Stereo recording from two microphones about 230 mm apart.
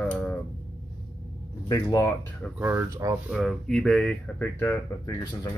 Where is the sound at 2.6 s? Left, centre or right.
Centre.